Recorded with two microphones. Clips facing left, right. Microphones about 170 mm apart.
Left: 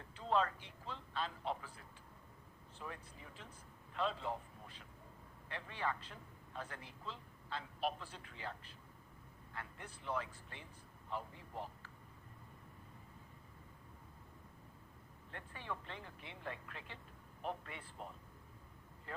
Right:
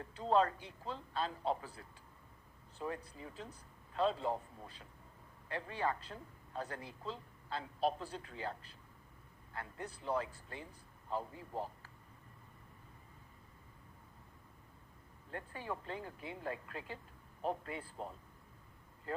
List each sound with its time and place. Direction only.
0.0 s speech: 40° right (ahead or behind)
15.3 s speech: 40° right (ahead or behind)